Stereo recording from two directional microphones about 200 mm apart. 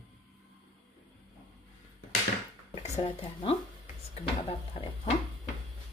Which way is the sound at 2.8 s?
30° left (ahead or behind).